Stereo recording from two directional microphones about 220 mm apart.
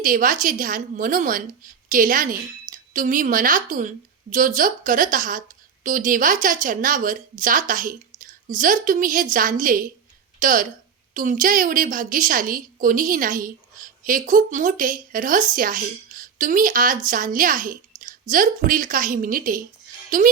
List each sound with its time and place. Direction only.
0.0 s a woman's voice: 40° right (ahead or behind)